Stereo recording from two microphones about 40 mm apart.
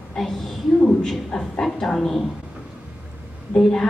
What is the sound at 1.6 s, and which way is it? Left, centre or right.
Speech, centre.